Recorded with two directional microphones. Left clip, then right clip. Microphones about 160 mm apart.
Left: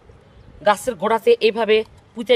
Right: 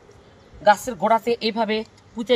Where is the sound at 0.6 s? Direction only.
60° left (ahead or behind).